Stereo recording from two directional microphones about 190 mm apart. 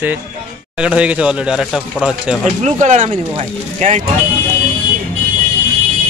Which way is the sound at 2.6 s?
40° right (ahead or behind).